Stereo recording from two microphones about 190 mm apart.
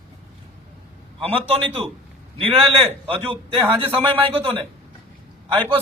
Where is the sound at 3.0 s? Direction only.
30° right (ahead or behind).